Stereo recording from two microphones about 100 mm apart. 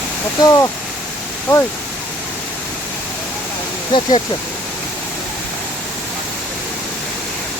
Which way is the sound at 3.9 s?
50° left (ahead or behind).